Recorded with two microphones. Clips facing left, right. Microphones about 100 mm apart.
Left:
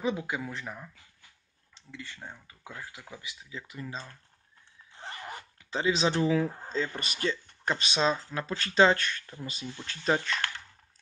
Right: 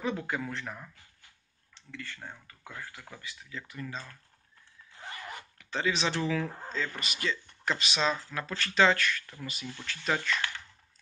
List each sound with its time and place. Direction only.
0.0 s speech: 10° left (ahead or behind)
1.9 s speech: 20° left (ahead or behind)
4.9 s zipper: 25° left (ahead or behind)
6.7 s speech: 30° left (ahead or behind)